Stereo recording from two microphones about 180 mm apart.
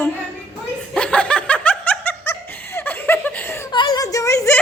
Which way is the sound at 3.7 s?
25° left (ahead or behind).